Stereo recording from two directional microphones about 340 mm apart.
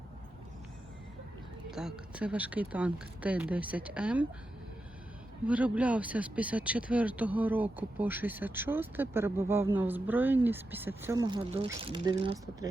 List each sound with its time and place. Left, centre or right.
1.7 s speech: centre
5.5 s speech: centre